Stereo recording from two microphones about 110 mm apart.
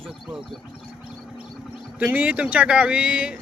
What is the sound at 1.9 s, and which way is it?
Speech, 15° right (ahead or behind).